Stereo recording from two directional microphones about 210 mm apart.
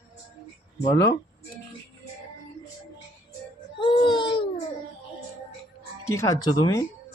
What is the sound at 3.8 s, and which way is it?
Baby cry, 25° left (ahead or behind).